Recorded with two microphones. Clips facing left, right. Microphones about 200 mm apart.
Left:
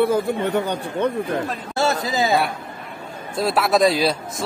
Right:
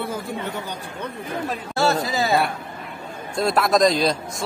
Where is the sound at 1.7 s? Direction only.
20° left (ahead or behind).